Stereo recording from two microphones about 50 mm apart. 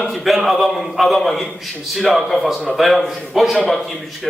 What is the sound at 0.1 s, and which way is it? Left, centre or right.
A man's voice, centre.